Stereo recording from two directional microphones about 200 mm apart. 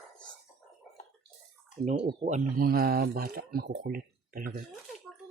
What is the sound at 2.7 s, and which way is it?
Speech, 50° right (ahead or behind).